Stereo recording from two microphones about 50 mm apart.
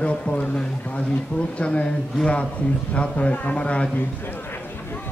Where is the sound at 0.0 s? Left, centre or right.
Left.